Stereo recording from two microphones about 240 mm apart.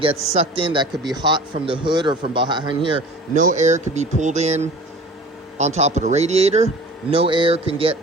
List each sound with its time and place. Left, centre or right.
0.0 s a man's voice: right
3.3 s a man's voice: right